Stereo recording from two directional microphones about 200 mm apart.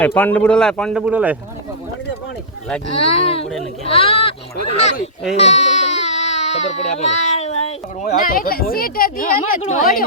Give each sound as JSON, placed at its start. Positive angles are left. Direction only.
{"t": 0.0, "sound": "speech", "side_deg": 10}
{"t": 2.9, "sound": "speech", "side_deg": 30}
{"t": 5.4, "sound": "baby cry", "side_deg": 35}
{"t": 8.0, "sound": "speech", "side_deg": 45}